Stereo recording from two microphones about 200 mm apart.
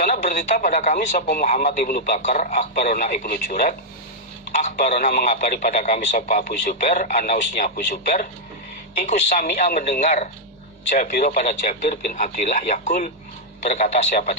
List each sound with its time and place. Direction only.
0.0 s a man's voice: 40° left (ahead or behind)